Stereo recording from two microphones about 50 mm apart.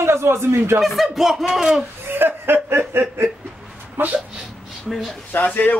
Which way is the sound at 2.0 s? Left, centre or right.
Right.